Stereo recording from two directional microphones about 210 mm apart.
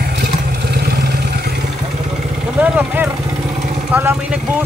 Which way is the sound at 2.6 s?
10° right (ahead or behind).